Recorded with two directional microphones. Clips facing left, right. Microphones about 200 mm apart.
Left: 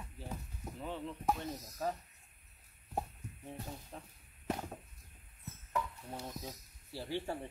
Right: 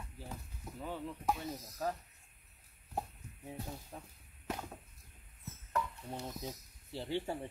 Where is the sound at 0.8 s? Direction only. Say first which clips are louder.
Even; 5° right (ahead or behind).